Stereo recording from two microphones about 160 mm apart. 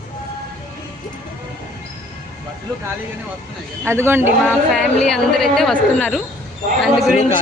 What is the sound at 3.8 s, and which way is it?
Speech, 15° right (ahead or behind).